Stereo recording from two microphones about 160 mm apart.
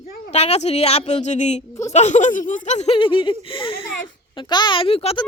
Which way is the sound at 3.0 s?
30° left (ahead or behind).